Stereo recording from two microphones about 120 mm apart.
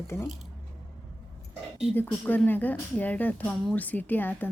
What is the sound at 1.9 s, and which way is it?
Speech, 15° left (ahead or behind).